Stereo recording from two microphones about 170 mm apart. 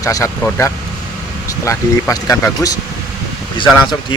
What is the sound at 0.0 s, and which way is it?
Speech, 20° left (ahead or behind).